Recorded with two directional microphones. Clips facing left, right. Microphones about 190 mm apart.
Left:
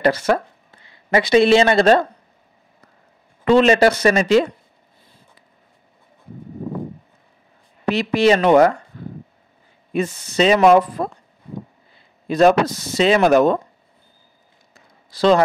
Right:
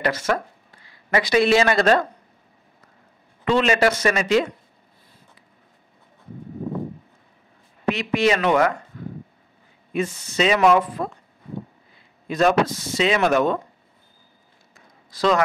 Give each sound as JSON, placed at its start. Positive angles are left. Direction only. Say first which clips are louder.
{"t": 0.0, "sound": "speech", "louder": "left 5 dB", "side_deg": 35}
{"t": 3.4, "sound": "speech", "louder": "left 6 dB", "side_deg": 35}
{"t": 7.9, "sound": "speech", "louder": "left 5 dB", "side_deg": 35}
{"t": 9.9, "sound": "speech", "louder": "left 4 dB", "side_deg": 35}
{"t": 12.3, "sound": "speech", "louder": "left 4 dB", "side_deg": 35}
{"t": 14.7, "sound": "a sound", "louder": "even", "side_deg": 30}